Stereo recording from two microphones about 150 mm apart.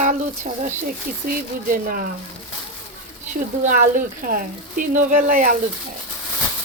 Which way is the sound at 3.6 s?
60° right (ahead or behind).